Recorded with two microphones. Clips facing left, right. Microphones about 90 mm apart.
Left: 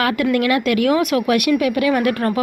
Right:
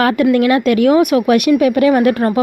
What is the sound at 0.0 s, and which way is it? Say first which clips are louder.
Speech: right 5 dB; 30° right (ahead or behind).